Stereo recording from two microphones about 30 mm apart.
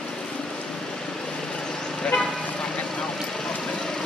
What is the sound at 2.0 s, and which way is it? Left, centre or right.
Vehicle, left.